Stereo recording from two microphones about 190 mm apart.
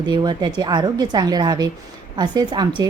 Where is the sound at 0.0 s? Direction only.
20° right (ahead or behind).